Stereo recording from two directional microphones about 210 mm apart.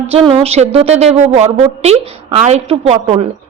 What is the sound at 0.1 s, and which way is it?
A woman's voice, 30° right (ahead or behind).